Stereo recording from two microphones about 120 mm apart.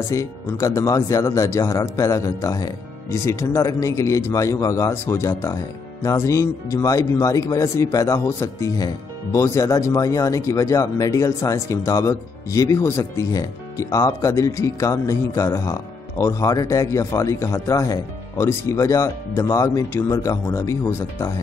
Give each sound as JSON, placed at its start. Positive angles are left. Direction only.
{"t": 0.1, "sound": "speech", "side_deg": 25}